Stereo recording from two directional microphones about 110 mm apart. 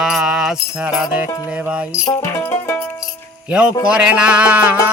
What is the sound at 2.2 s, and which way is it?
Music, 25° left (ahead or behind).